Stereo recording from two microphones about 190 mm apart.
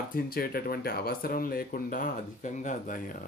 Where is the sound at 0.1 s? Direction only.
50° left (ahead or behind).